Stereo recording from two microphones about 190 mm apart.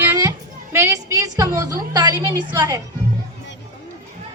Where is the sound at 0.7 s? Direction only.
15° right (ahead or behind).